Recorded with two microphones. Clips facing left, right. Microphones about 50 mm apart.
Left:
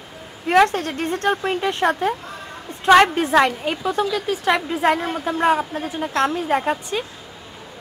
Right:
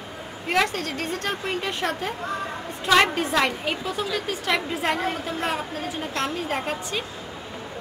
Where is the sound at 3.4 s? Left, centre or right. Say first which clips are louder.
Left 4 dB; centre.